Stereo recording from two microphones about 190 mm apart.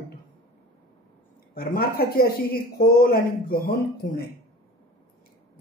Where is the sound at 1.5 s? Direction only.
55° left (ahead or behind).